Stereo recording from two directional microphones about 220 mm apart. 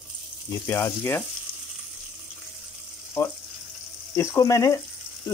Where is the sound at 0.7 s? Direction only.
10° left (ahead or behind).